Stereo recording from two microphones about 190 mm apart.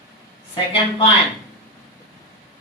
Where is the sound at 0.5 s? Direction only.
25° left (ahead or behind).